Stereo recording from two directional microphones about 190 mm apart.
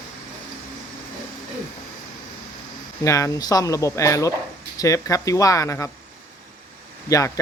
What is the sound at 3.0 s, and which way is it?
Speech, 15° left (ahead or behind).